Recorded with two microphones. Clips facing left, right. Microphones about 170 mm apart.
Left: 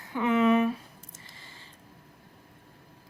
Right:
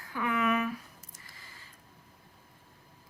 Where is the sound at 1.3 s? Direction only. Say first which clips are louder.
Left 3 dB; 25° left (ahead or behind).